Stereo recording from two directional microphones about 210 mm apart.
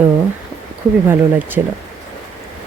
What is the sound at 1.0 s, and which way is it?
Speech, 10° right (ahead or behind).